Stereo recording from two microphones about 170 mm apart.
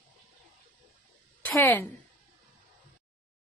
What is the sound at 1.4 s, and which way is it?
Speech, 10° left (ahead or behind).